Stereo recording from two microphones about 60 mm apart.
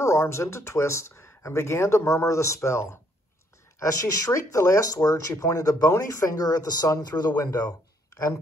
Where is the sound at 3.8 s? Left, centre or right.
Left.